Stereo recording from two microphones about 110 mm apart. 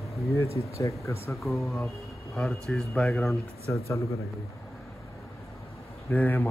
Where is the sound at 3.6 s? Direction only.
25° left (ahead or behind).